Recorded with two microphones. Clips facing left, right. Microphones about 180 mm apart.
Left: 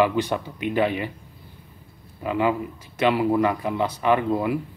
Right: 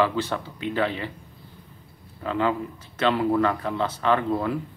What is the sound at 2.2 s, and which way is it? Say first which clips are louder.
Speech: left 2 dB; 10° left (ahead or behind).